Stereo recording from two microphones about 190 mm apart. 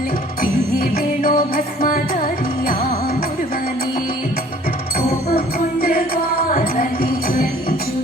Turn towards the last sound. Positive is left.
turn(degrees=50)  # may be behind; listen again after turning